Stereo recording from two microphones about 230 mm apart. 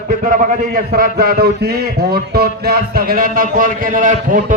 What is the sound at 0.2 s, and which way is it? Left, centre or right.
A man's voice, right.